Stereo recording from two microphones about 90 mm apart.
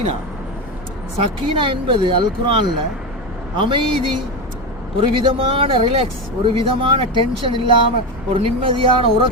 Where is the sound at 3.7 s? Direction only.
70° right (ahead or behind).